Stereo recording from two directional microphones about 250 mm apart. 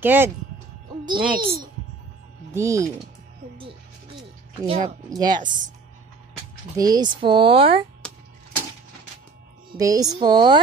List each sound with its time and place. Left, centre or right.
0.0 s speech: centre
1.0 s a child's voice: centre
4.6 s speech: right
6.8 s speech: centre
9.7 s speech: centre